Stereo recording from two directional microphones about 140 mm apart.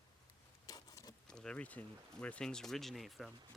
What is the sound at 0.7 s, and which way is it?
Patter, 25° left (ahead or behind).